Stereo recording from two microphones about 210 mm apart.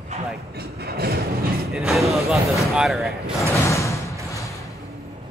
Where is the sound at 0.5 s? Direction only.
50° right (ahead or behind).